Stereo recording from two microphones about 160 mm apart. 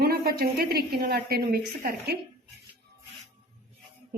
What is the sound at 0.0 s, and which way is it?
Speech, 75° right (ahead or behind).